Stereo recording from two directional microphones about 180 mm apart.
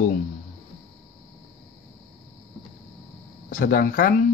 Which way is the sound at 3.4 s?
50° left (ahead or behind).